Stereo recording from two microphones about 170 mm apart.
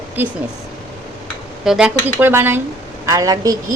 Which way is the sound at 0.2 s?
10° right (ahead or behind).